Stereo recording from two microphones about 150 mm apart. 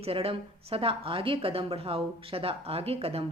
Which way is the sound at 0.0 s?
40° right (ahead or behind).